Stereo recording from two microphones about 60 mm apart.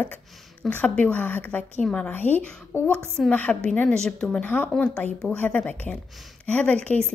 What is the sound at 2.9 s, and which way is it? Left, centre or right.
A woman's voice, centre.